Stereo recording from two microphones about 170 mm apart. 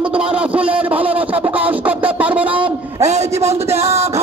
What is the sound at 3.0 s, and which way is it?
A man's voice, 40° right (ahead or behind).